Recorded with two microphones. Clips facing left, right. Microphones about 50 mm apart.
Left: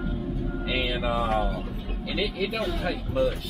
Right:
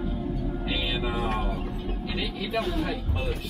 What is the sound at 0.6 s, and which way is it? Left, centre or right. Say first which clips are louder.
Music: left 3 dB; left.